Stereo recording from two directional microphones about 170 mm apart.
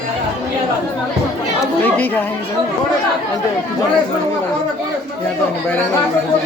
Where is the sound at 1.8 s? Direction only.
10° left (ahead or behind).